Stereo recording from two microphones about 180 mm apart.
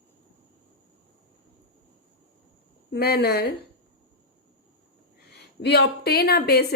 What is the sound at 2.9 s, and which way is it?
Speech, 65° left (ahead or behind).